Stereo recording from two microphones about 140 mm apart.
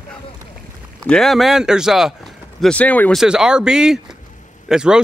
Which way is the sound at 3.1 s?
5° right (ahead or behind).